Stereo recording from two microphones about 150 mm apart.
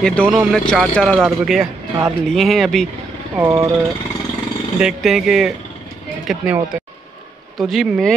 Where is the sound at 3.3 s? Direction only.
20° right (ahead or behind).